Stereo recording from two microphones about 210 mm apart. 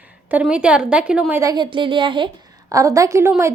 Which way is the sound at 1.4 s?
20° right (ahead or behind).